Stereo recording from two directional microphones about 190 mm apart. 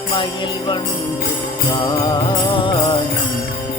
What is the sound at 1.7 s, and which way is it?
Mantra, 20° left (ahead or behind).